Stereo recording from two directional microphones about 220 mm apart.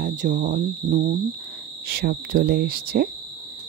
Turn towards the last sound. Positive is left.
turn(degrees=-45)  # may be behind; listen again after turning